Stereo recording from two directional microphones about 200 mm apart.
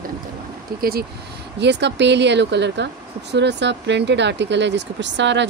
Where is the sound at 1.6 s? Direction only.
60° right (ahead or behind).